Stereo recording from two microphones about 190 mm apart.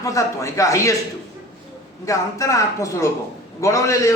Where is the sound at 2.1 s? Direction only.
15° left (ahead or behind).